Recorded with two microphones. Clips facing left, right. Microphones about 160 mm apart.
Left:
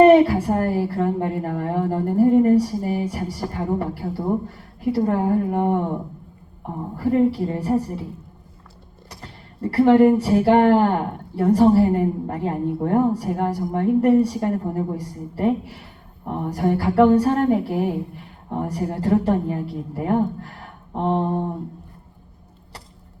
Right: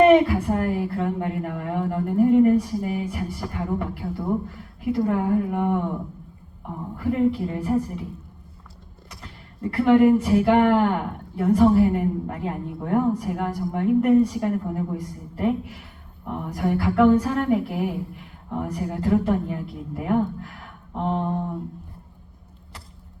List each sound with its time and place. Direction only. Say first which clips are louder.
0.0 s speech: left 3 dB; 35° left (ahead or behind)
9.0 s speech: left 3 dB; 35° left (ahead or behind)